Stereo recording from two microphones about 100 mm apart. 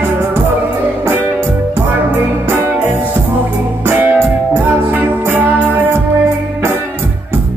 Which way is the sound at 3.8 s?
20° right (ahead or behind).